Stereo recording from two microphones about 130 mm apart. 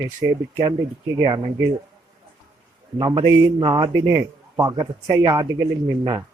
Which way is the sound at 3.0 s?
30° right (ahead or behind).